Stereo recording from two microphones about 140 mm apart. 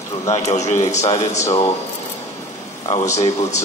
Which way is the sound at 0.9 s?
55° left (ahead or behind).